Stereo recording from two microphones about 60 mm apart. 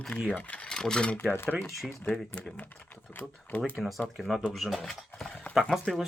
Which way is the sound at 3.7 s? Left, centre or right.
Centre.